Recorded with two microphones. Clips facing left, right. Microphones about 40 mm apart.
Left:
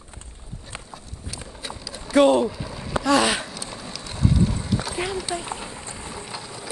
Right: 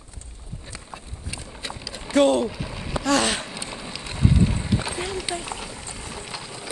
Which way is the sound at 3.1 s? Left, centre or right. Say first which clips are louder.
Left 2 dB; centre.